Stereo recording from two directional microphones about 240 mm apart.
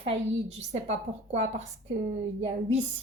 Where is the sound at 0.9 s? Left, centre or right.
Right.